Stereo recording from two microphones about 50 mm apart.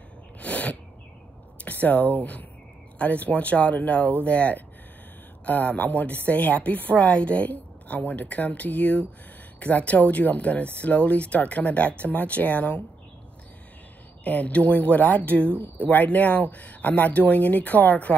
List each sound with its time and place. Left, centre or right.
0.4 s sneeze: left
1.6 s a sound: left
3.0 s a woman's voice: left
14.2 s a woman's voice: left